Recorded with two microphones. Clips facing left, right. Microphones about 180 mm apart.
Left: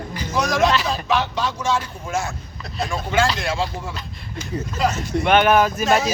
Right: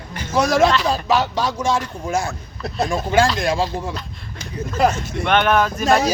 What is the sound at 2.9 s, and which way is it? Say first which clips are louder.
Speech: right 3 dB; 35° right (ahead or behind).